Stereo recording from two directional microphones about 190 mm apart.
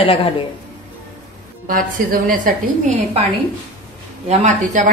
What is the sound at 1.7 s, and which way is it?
Speech, 45° right (ahead or behind).